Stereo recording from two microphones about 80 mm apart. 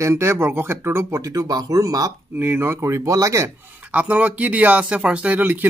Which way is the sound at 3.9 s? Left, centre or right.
Centre.